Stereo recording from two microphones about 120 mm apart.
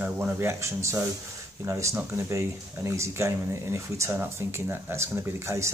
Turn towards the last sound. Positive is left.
turn(degrees=-25)  # may be behind; listen again after turning